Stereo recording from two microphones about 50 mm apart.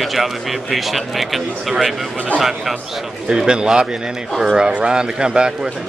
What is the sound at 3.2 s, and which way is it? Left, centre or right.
Speech, centre.